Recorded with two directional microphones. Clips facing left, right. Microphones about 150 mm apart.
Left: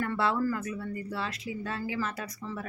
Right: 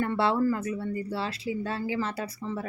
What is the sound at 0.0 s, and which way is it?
Speech, 25° right (ahead or behind).